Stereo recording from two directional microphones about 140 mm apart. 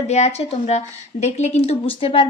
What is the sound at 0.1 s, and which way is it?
Speech, 50° left (ahead or behind).